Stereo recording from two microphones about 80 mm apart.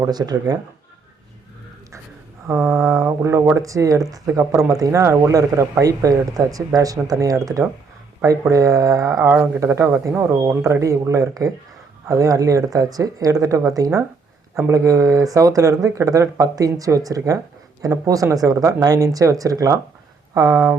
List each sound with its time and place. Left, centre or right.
0.0 s speech: right
2.5 s speech: right
9.6 s speech: right